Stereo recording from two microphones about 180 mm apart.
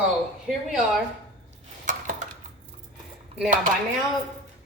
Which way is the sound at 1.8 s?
45° right (ahead or behind).